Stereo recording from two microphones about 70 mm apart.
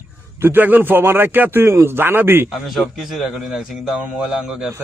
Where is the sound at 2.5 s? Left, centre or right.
Centre.